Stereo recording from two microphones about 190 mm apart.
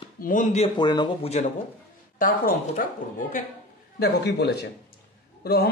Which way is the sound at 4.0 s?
60° left (ahead or behind).